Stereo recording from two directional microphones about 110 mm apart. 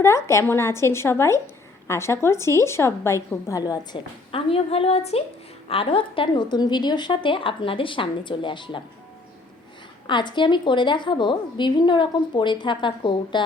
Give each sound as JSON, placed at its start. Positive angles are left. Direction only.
{"t": 0.0, "sound": "a woman's voice", "side_deg": 25}
{"t": 4.3, "sound": "a woman's voice", "side_deg": 60}
{"t": 10.1, "sound": "a woman's voice", "side_deg": 45}